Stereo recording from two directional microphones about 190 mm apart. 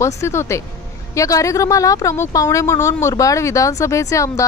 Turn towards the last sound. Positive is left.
turn(degrees=15)  # may be behind; listen again after turning